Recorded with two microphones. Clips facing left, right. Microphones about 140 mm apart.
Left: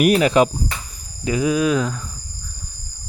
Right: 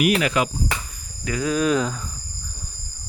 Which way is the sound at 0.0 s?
40° left (ahead or behind).